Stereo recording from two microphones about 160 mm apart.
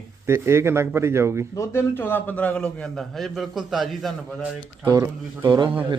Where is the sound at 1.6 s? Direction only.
15° left (ahead or behind).